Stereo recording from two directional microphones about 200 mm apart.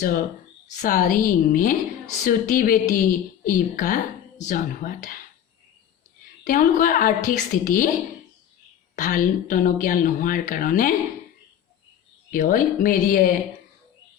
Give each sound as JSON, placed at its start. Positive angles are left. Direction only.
{"t": 0.8, "sound": "speech", "side_deg": 45}
{"t": 6.4, "sound": "speech", "side_deg": 40}
{"t": 9.0, "sound": "speech", "side_deg": 40}
{"t": 12.3, "sound": "speech", "side_deg": 40}